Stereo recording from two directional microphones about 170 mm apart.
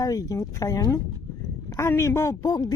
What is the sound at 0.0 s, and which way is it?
Speech, 20° left (ahead or behind).